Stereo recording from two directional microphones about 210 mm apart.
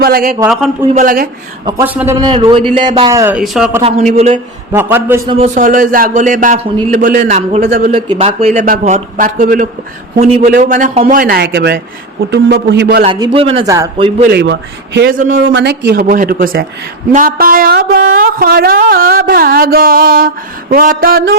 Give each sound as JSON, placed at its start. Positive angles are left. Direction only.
{"t": 0.0, "sound": "speech", "side_deg": -45}
{"t": 0.3, "sound": "a man's voice", "side_deg": -5}
{"t": 0.9, "sound": "speech", "side_deg": -45}
{"t": 1.8, "sound": "speech", "side_deg": -10}
{"t": 2.2, "sound": "a man's voice", "side_deg": -25}
{"t": 3.1, "sound": "speech", "side_deg": -10}
{"t": 5.3, "sound": "a man's voice", "side_deg": -35}
{"t": 6.9, "sound": "speech", "side_deg": -50}
{"t": 7.3, "sound": "a man's voice", "side_deg": -30}
{"t": 8.2, "sound": "a man's voice", "side_deg": -30}
{"t": 13.1, "sound": "a man's voice", "side_deg": -20}
{"t": 13.7, "sound": "speech", "side_deg": -15}
{"t": 14.3, "sound": "speech", "side_deg": -55}
{"t": 15.2, "sound": "speech", "side_deg": -45}